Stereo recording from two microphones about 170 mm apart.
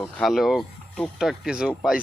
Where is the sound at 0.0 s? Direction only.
5° left (ahead or behind).